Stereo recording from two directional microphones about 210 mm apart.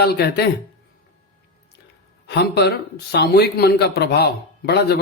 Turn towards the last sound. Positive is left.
turn(degrees=50)  # may be behind; listen again after turning